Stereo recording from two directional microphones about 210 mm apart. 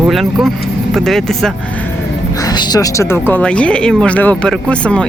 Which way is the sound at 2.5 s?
20° left (ahead or behind).